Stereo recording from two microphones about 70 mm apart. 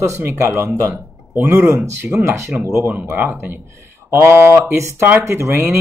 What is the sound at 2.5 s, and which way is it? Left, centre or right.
Speech, right.